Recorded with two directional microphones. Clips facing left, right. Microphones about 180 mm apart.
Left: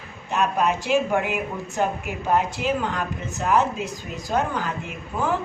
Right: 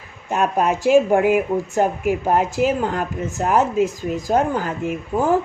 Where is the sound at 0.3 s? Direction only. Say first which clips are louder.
Right 3 dB; 45° right (ahead or behind).